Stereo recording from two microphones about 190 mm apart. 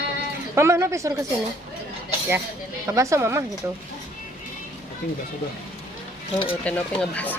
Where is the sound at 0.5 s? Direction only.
15° right (ahead or behind).